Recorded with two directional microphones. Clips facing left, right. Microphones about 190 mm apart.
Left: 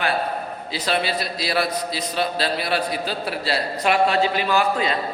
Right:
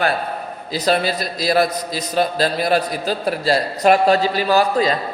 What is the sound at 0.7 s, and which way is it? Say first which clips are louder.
A man's voice: right 5 dB; 40° right (ahead or behind).